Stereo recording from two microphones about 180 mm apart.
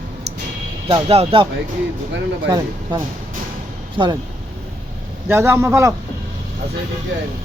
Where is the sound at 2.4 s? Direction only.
20° right (ahead or behind).